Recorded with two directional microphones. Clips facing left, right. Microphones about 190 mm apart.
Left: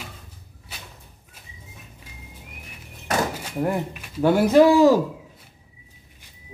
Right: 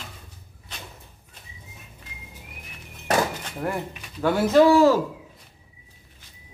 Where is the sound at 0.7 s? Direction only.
5° left (ahead or behind).